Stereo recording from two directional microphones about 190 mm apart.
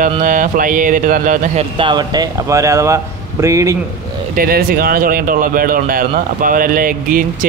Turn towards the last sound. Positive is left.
turn(degrees=-45)  # may be behind; listen again after turning